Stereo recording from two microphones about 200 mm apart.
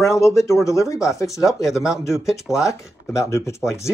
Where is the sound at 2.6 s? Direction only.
15° left (ahead or behind).